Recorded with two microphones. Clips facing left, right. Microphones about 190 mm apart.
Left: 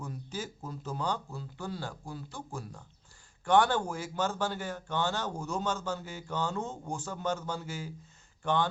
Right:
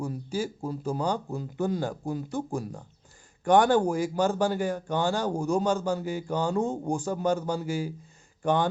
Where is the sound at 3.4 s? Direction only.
15° right (ahead or behind).